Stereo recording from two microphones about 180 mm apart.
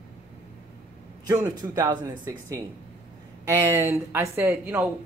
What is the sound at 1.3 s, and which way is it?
Speech, 20° right (ahead or behind).